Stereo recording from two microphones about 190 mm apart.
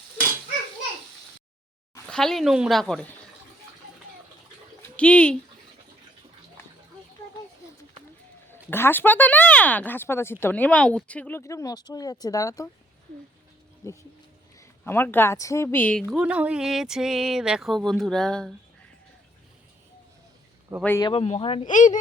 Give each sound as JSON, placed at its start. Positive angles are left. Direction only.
{"t": 2.0, "sound": "speech", "side_deg": 5}
{"t": 4.8, "sound": "speech", "side_deg": 5}
{"t": 8.4, "sound": "speech", "side_deg": 10}
{"t": 13.8, "sound": "speech", "side_deg": 15}
{"t": 16.0, "sound": "speech", "side_deg": -5}
{"t": 21.0, "sound": "speech", "side_deg": 30}
{"t": 21.7, "sound": "speech", "side_deg": 40}